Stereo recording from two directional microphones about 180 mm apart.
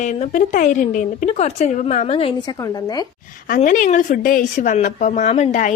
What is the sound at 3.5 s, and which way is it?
Speech, 45° left (ahead or behind).